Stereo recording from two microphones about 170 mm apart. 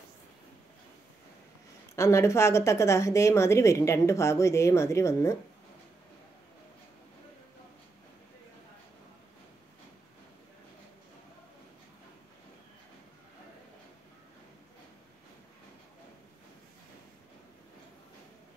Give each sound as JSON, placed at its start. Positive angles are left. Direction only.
{"t": 2.0, "sound": "a woman's voice", "side_deg": 15}